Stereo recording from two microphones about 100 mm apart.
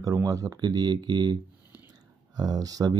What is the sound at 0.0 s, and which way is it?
Speech, 35° right (ahead or behind).